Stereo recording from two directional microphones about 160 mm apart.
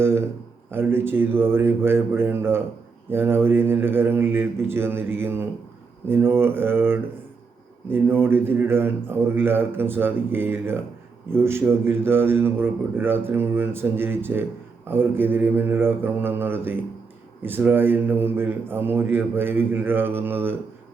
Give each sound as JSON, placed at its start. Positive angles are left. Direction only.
{"t": 0.0, "sound": "a man's voice", "side_deg": -15}